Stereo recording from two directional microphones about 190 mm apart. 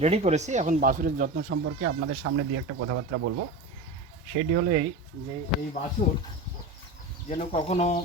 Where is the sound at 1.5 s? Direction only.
80° right.